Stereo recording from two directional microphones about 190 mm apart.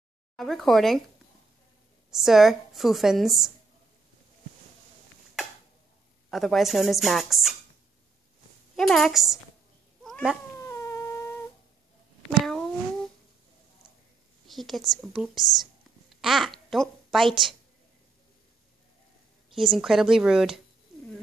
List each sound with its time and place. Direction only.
0.4 s a woman's voice: centre (ahead or behind)
2.0 s a woman's voice: centre (ahead or behind)
6.3 s a woman's voice: centre (ahead or behind)
8.7 s a woman's voice: centre (ahead or behind)
10.0 s cat: centre (ahead or behind)
10.6 s a sound: 15° left (ahead or behind)
12.3 s a sound: centre (ahead or behind)
14.5 s a woman's voice: centre (ahead or behind)
19.5 s a woman's voice: centre (ahead or behind)